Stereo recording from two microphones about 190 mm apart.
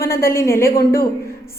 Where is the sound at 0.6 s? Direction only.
55° left (ahead or behind).